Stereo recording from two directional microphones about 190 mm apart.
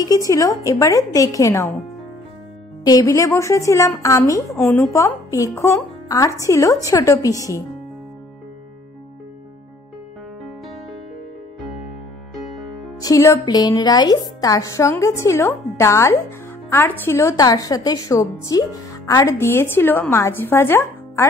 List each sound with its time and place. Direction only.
0.0 s a woman's voice: 20° left (ahead or behind)
2.8 s a woman's voice: 20° left (ahead or behind)
13.0 s a woman's voice: 15° left (ahead or behind)